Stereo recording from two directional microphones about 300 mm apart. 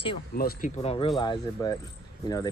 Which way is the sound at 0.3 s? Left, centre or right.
Left.